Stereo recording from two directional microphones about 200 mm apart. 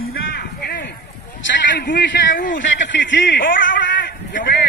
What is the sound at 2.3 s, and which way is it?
Speech, 45° left (ahead or behind).